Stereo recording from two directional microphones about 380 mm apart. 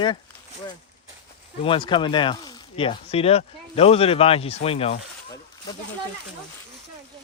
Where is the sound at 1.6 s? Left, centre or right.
Centre.